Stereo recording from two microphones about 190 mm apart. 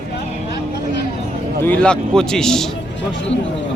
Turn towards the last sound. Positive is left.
turn(degrees=70)  # may be behind; listen again after turning